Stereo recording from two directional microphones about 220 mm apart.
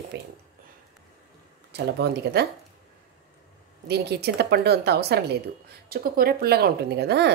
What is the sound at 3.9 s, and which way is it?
Speech, 50° right (ahead or behind).